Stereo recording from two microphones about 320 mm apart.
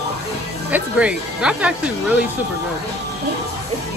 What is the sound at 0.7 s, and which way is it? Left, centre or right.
Speech, centre.